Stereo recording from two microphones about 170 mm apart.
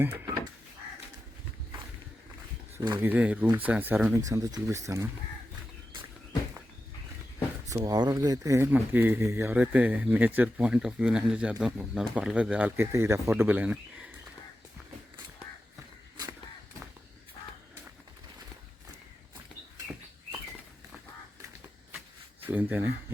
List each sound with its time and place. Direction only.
0.0 s speech: 15° right (ahead or behind)
3.0 s speech: 10° right (ahead or behind)
7.7 s speech: 20° right (ahead or behind)
22.4 s speech: 10° right (ahead or behind)